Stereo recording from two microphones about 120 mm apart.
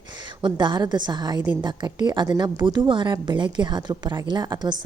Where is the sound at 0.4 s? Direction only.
40° right (ahead or behind).